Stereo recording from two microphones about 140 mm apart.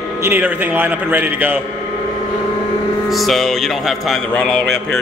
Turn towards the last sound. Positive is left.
turn(degrees=5)  # may be behind; listen again after turning